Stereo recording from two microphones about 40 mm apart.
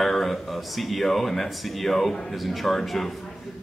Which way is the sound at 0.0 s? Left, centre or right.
Centre.